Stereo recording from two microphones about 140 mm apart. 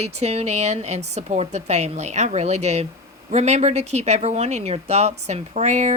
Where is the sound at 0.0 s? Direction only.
50° right (ahead or behind).